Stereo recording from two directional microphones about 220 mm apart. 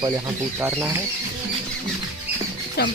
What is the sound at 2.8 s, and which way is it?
Speech, 45° left (ahead or behind).